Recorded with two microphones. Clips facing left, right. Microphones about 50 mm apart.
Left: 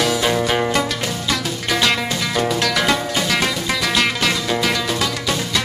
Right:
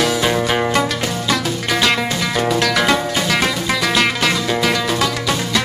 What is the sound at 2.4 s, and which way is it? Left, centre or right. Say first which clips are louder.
Music: right 4 dB; right.